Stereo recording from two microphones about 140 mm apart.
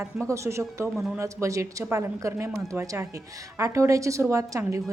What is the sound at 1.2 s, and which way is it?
A woman's voice, 20° right (ahead or behind).